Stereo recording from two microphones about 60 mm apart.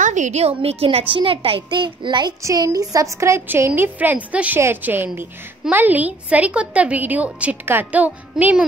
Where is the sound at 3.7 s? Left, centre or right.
Right.